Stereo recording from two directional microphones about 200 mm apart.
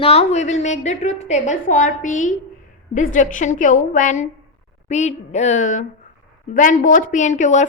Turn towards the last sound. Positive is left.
turn(degrees=35)  # may be behind; listen again after turning